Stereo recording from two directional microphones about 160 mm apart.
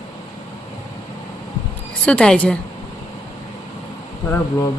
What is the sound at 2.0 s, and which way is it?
Speech, 5° left (ahead or behind).